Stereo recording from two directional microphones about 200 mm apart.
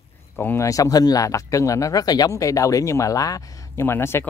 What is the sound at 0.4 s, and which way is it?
Speech, 15° left (ahead or behind).